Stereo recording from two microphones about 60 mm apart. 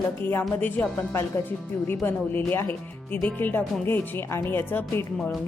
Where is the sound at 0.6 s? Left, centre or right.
Left.